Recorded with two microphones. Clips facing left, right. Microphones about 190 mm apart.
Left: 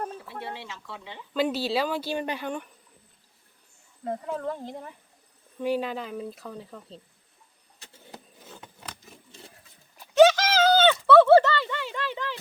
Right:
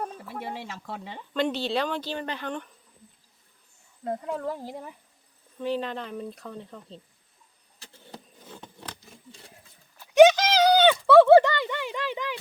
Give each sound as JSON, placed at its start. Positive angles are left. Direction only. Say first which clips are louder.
{"t": 0.6, "sound": "speech", "louder": "right 4 dB", "side_deg": -45}
{"t": 1.3, "sound": "speech", "louder": "left 1 dB", "side_deg": 5}
{"t": 4.0, "sound": "speech", "louder": "even", "side_deg": 0}
{"t": 5.5, "sound": "speech", "louder": "left 2 dB", "side_deg": 10}
{"t": 8.1, "sound": "a sound", "louder": "right 2 dB", "side_deg": 5}
{"t": 10.2, "sound": "a sound", "louder": "right 2 dB", "side_deg": -15}